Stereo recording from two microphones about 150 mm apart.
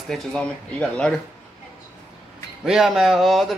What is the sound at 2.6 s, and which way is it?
Speech, 5° right (ahead or behind).